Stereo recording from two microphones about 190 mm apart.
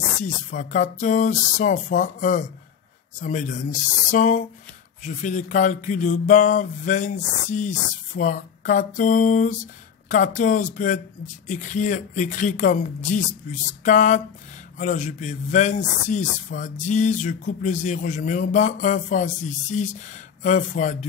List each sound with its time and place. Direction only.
0.2 s a man's voice: 40° left (ahead or behind)